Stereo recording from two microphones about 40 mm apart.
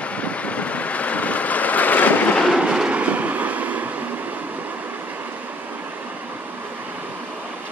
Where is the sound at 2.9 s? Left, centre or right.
Right.